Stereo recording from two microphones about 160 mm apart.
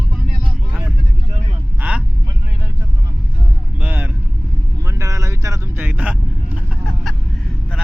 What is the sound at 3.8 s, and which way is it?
Vehicle, 10° right (ahead or behind).